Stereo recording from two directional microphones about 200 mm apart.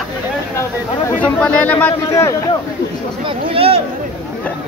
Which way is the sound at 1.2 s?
5° left (ahead or behind).